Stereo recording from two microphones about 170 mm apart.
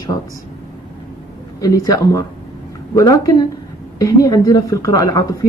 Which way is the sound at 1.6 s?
20° left (ahead or behind).